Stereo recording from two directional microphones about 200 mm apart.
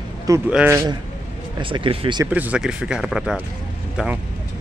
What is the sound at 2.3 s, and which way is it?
Speech, 5° right (ahead or behind).